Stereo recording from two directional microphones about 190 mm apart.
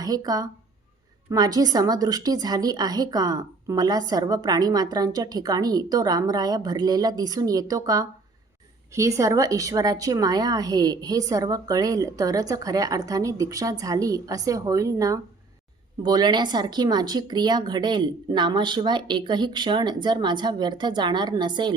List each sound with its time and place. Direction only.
0.0 s a woman's voice: 20° right (ahead or behind)